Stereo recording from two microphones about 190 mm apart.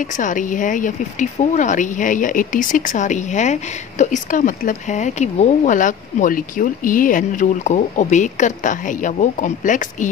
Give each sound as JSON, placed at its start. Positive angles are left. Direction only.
{"t": 0.2, "sound": "speech", "side_deg": 45}